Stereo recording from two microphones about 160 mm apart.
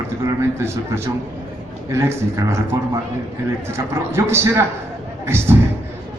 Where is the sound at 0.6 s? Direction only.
15° right (ahead or behind).